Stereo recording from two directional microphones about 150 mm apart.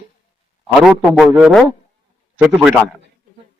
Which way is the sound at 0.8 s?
5° right (ahead or behind).